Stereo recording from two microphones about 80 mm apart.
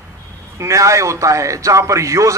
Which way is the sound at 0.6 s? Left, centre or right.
Right.